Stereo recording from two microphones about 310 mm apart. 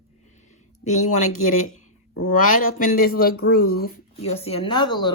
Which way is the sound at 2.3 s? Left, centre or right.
Left.